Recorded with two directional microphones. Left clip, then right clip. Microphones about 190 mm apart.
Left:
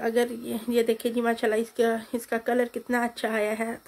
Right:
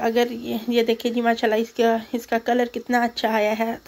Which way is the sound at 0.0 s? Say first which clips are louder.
Right 4 dB; centre (ahead or behind).